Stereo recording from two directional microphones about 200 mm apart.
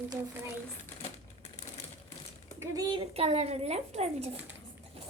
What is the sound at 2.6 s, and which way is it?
A woman's voice, 20° right (ahead or behind).